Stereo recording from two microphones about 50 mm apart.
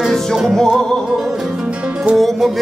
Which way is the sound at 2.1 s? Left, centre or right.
Centre.